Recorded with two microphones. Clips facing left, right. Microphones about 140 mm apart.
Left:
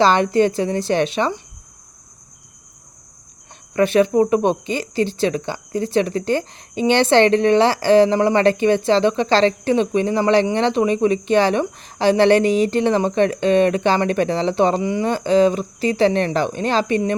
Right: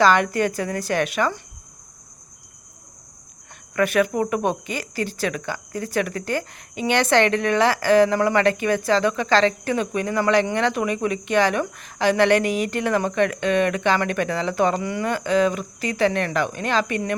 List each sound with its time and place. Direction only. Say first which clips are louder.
0.0 s speech: left 3 dB; 30° left (ahead or behind)
3.8 s speech: left 5 dB; 25° left (ahead or behind)